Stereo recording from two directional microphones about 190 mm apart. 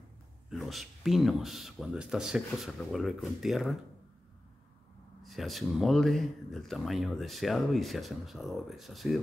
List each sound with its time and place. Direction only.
0.5 s speech: centre (ahead or behind)
5.2 s speech: centre (ahead or behind)